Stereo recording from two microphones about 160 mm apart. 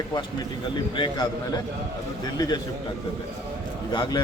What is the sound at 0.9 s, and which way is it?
A man's voice, 30° left (ahead or behind).